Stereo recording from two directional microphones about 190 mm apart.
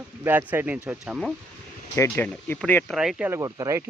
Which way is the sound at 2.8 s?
Centre (ahead or behind).